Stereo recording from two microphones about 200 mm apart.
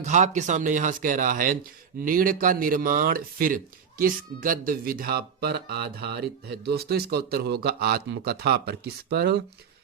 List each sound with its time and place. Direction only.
0.0 s speech: 35° right (ahead or behind); by 9.3 s 55° right (ahead or behind)